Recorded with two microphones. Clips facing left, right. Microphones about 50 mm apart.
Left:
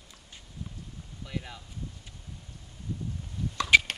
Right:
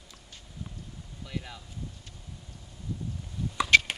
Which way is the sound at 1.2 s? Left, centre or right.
Centre.